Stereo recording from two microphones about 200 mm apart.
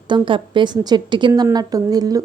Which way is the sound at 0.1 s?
25° right (ahead or behind).